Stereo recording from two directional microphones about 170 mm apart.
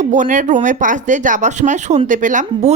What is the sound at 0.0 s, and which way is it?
A woman's voice, 45° right (ahead or behind).